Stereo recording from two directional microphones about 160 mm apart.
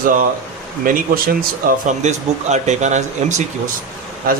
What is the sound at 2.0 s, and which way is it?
Speech, 45° right (ahead or behind).